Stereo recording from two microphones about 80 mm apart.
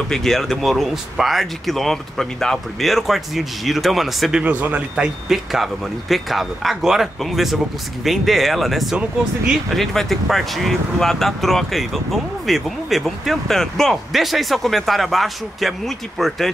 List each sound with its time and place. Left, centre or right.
0.1 s speech: centre
4.4 s speech: right
5.3 s speech: centre